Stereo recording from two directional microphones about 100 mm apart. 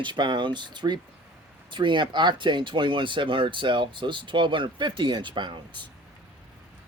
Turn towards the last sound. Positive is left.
turn(degrees=-50)  # may be behind; listen again after turning